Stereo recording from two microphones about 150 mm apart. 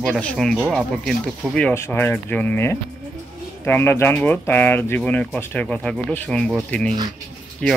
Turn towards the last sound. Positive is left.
turn(degrees=5)  # may be behind; listen again after turning